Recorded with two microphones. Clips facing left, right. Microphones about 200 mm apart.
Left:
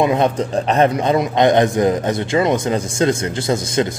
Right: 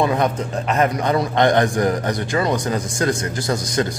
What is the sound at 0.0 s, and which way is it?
A man's voice, 20° left (ahead or behind).